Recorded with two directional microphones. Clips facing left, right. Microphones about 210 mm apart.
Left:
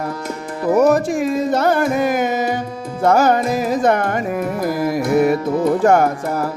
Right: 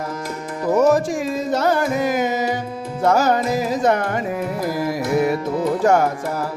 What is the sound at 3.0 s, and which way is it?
Music, 55° left (ahead or behind).